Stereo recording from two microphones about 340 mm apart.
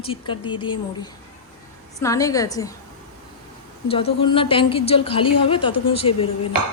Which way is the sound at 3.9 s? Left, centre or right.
Centre.